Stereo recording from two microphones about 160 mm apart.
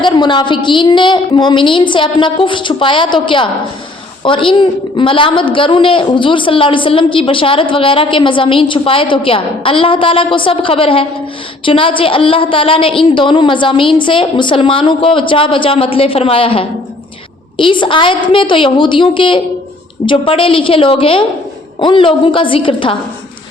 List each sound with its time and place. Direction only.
0.0 s a woman's voice: 30° left (ahead or behind)